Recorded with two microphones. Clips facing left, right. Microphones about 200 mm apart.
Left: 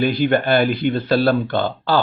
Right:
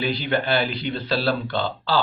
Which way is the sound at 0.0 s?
50° left (ahead or behind).